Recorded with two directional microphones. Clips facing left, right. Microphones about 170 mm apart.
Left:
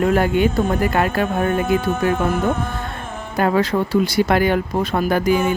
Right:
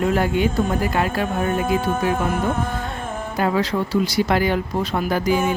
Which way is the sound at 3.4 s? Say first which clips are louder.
Left 3 dB; 55° left (ahead or behind).